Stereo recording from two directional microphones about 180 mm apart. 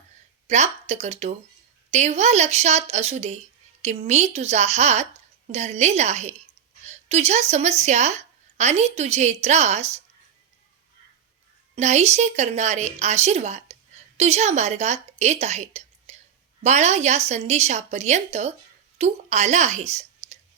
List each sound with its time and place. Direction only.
0.4 s a woman's voice: 40° right (ahead or behind)
11.7 s a woman's voice: 40° right (ahead or behind)